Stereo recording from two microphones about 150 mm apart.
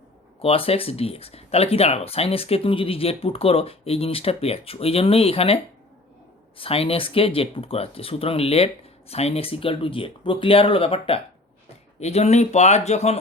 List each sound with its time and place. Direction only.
0.4 s speech: 40° left (ahead or behind)
6.6 s speech: 40° left (ahead or behind)